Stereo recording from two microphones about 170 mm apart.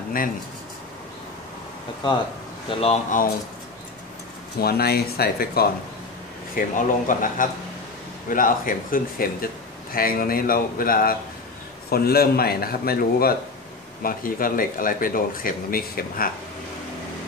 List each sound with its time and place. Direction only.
2.8 s speech: 40° left (ahead or behind)
4.6 s speech: 65° left (ahead or behind)
6.5 s speech: 50° left (ahead or behind)